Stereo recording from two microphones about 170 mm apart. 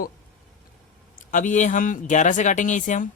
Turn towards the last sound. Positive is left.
turn(degrees=45)  # may be behind; listen again after turning